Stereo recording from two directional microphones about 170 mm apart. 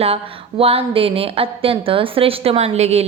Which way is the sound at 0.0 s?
35° right (ahead or behind).